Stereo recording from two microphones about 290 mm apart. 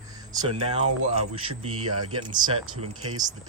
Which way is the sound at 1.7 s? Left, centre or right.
Right.